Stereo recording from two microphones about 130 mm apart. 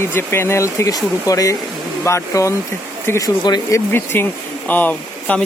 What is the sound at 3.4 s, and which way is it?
Speech, 30° left (ahead or behind).